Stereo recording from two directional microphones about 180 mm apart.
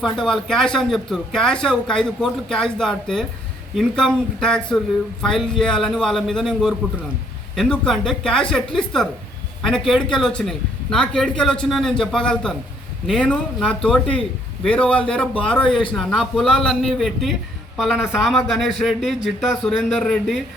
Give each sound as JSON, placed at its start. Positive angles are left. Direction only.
{"t": 0.0, "sound": "speech", "side_deg": 0}
{"t": 15.6, "sound": "speech", "side_deg": 25}
{"t": 16.0, "sound": "speech", "side_deg": 0}